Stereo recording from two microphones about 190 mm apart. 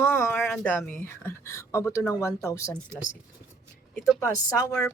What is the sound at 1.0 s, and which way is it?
Speech, 15° left (ahead or behind).